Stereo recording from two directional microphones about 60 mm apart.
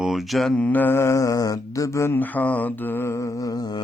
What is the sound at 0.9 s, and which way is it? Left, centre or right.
Mantra, left.